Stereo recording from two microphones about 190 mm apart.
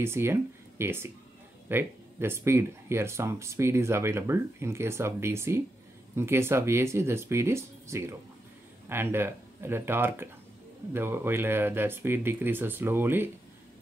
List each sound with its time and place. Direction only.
0.0 s speech: 15° right (ahead or behind)